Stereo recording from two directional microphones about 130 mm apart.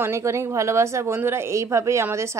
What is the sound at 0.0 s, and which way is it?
A woman's voice, 20° right (ahead or behind).